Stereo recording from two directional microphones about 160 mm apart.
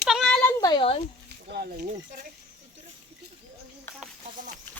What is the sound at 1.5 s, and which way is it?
Speech, 70° right (ahead or behind).